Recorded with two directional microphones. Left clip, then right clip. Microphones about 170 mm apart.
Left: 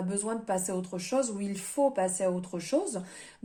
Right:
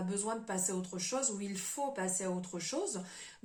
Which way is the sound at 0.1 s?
40° left (ahead or behind).